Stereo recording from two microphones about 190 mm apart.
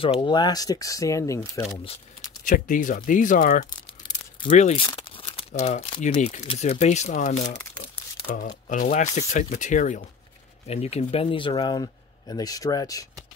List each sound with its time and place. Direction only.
0.2 s speech: 25° left (ahead or behind)
2.4 s speech: 45° left (ahead or behind)
4.4 s speech: 35° left (ahead or behind); by 13.0 s 20° left (ahead or behind)